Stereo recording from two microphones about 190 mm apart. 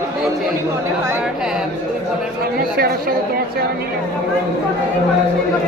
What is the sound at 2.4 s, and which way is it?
Speech, 55° right (ahead or behind).